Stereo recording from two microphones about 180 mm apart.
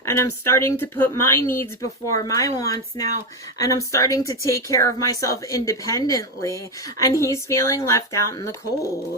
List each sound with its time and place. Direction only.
0.0 s speech: 15° left (ahead or behind)